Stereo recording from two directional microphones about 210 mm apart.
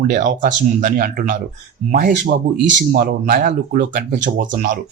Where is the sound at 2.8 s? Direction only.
45° right (ahead or behind).